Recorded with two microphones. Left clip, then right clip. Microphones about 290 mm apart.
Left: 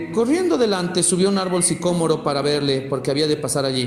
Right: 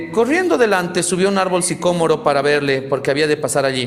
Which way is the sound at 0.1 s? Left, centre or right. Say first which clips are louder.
Right 4 dB; right.